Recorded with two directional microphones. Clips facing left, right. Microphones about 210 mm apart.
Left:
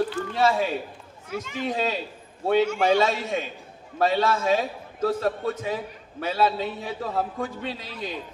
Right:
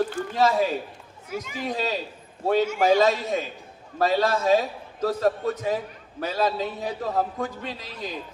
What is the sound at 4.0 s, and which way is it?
A man's voice, 40° right (ahead or behind).